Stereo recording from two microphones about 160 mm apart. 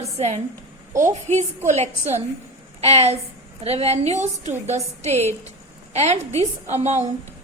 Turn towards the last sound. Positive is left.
turn(degrees=-45)  # may be behind; listen again after turning